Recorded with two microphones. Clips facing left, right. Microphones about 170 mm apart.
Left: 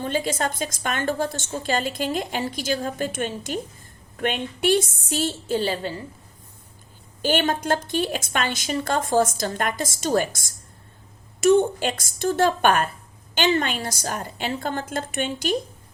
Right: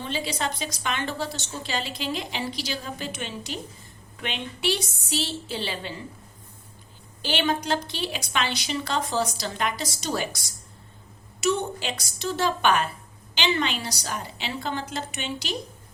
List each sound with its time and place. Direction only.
0.0 s a woman's voice: 50° left (ahead or behind)
7.2 s a woman's voice: 50° left (ahead or behind)